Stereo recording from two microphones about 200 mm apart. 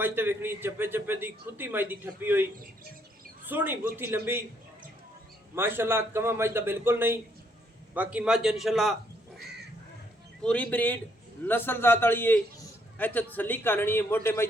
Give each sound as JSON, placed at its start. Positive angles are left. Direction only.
{"t": 0.0, "sound": "a man's voice", "side_deg": -10}
{"t": 3.5, "sound": "a man's voice", "side_deg": -10}
{"t": 5.5, "sound": "a man's voice", "side_deg": -10}
{"t": 10.4, "sound": "a man's voice", "side_deg": 5}